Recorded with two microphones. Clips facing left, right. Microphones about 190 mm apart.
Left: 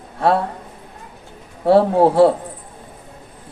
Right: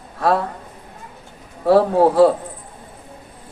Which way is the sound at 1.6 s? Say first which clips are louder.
Left 1 dB; 25° left (ahead or behind).